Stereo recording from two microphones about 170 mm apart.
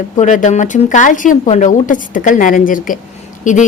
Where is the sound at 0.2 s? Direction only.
45° left (ahead or behind).